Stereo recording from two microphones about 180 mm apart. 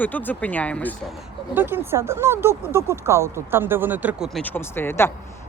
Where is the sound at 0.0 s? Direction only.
10° left (ahead or behind).